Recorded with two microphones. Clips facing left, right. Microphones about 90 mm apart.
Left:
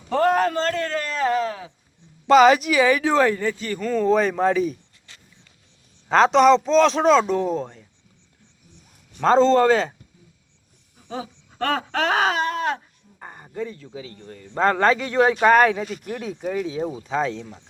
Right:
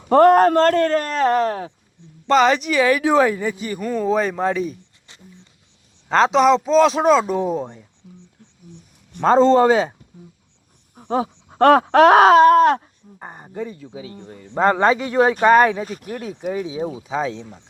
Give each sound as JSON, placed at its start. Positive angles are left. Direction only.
{"t": 0.1, "sound": "speech", "side_deg": -55}
{"t": 2.2, "sound": "a man's voice", "side_deg": 5}
{"t": 3.0, "sound": "speech", "side_deg": -10}
{"t": 6.1, "sound": "a man's voice", "side_deg": 0}
{"t": 9.2, "sound": "speech", "side_deg": -10}
{"t": 10.9, "sound": "groan", "side_deg": -50}
{"t": 13.1, "sound": "speech", "side_deg": -20}
{"t": 15.4, "sound": "a man's voice", "side_deg": 0}
{"t": 15.8, "sound": "speech", "side_deg": -40}
{"t": 16.2, "sound": "a man's voice", "side_deg": -5}